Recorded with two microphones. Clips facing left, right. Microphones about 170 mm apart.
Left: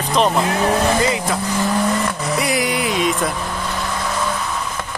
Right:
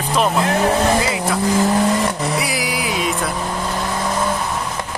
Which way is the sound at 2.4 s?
Centre (ahead or behind).